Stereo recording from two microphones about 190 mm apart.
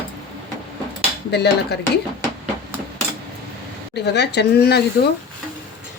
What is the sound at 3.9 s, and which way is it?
Speech, 60° left (ahead or behind).